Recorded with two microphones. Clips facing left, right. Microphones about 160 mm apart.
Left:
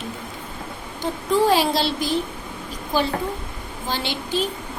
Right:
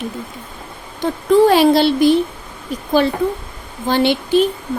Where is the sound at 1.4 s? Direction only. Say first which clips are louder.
Right 7 dB; 65° right (ahead or behind).